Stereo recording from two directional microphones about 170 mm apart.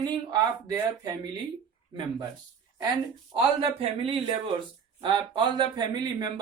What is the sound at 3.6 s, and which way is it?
Speech, 35° right (ahead or behind).